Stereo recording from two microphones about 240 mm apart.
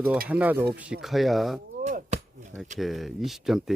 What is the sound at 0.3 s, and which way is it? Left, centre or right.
Speech, centre.